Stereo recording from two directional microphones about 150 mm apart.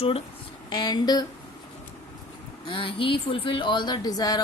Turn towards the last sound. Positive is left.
turn(degrees=25)  # may be behind; listen again after turning